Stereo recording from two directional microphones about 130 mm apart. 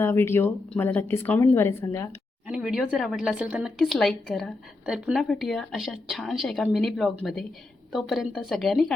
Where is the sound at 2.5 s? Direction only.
5° right (ahead or behind).